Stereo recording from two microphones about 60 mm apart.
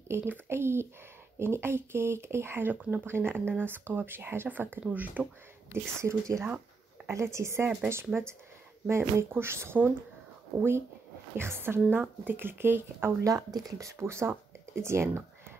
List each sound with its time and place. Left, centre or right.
0.1 s speech: right
5.7 s speech: right
11.3 s speech: right
13.2 s speech: right